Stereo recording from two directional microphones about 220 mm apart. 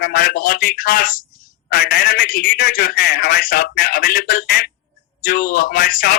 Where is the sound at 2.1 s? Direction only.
40° left (ahead or behind).